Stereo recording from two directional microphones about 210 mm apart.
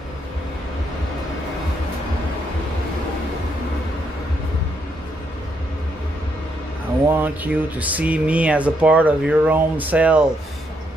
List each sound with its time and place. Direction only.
7.1 s speech: 10° right (ahead or behind)